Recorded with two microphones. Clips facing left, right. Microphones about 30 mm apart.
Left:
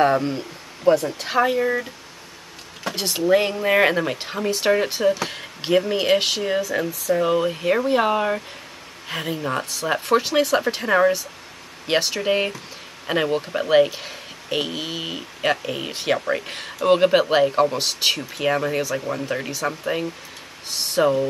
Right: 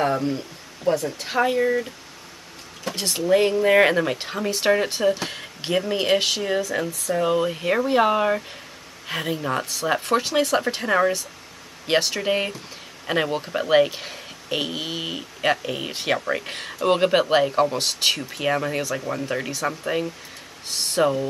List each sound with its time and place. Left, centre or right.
0.0 s speech: left
1.3 s speech: centre
3.3 s speech: centre